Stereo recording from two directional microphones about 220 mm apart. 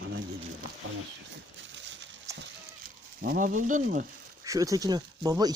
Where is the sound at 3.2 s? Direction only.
40° right (ahead or behind).